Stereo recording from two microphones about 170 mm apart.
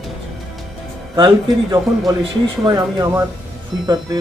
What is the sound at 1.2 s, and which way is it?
Speech, 25° right (ahead or behind).